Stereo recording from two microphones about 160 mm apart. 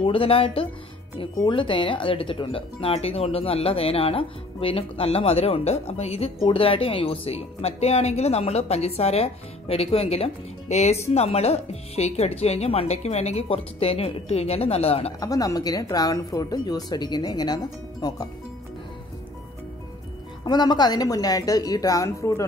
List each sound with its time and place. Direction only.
0.0 s speech: 35° left (ahead or behind)
15.1 s a woman's voice: 20° left (ahead or behind)
20.4 s a woman's voice: 25° left (ahead or behind)